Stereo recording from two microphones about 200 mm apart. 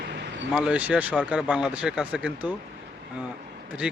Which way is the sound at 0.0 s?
55° right (ahead or behind).